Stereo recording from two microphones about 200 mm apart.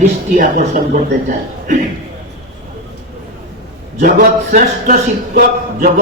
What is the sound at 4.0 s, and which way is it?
Speech, 45° right (ahead or behind).